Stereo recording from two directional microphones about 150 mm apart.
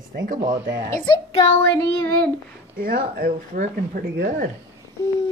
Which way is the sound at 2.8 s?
80° right.